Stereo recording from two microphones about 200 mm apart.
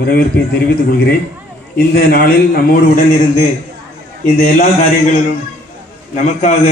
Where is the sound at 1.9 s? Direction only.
50° left (ahead or behind).